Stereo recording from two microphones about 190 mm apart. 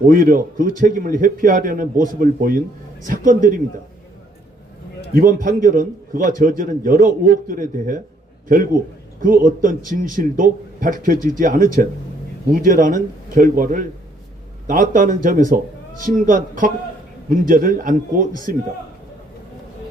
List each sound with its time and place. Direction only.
0.0 s a man's voice: 45° right (ahead or behind)
5.1 s a man's voice: 45° right (ahead or behind)
9.2 s a man's voice: 45° right (ahead or behind)